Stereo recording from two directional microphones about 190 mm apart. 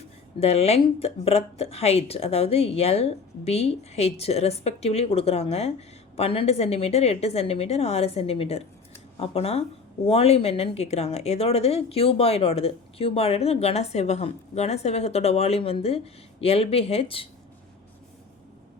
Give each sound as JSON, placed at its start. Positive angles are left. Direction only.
{"t": 0.3, "sound": "speech", "side_deg": 35}